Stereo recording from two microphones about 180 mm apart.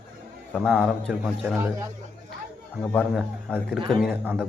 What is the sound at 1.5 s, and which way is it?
Speech, 15° right (ahead or behind).